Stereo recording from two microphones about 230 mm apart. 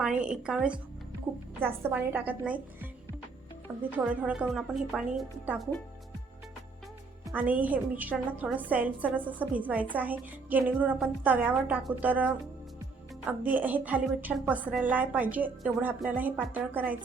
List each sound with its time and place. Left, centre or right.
0.0 s a woman's voice: centre
7.3 s a woman's voice: centre